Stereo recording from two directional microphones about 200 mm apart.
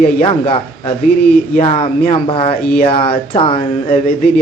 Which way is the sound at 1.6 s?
30° left (ahead or behind).